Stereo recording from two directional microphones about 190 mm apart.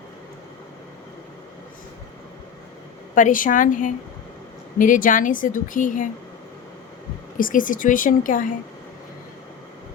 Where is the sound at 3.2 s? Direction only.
45° left (ahead or behind).